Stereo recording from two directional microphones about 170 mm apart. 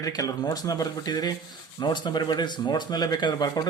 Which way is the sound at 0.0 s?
20° left (ahead or behind).